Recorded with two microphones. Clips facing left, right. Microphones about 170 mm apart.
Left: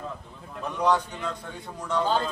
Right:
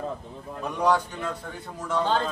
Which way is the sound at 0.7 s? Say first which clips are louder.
Right 1 dB; 10° right (ahead or behind).